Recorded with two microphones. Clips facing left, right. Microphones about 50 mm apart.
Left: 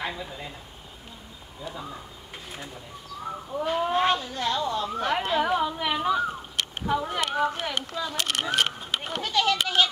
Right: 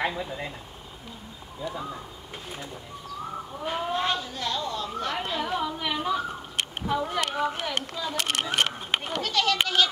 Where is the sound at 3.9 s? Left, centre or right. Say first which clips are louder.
Left 3 dB; left.